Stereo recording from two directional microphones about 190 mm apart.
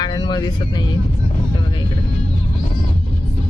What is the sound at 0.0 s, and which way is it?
Speech, 20° left (ahead or behind).